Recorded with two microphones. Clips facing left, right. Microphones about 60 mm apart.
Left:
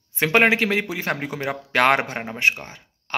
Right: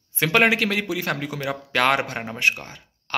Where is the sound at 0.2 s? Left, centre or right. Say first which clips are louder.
Left 1 dB; left.